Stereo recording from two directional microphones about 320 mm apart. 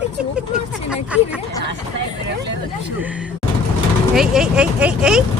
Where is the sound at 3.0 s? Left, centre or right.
Centre.